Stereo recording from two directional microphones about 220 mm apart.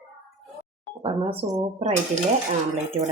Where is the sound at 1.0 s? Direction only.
25° right (ahead or behind).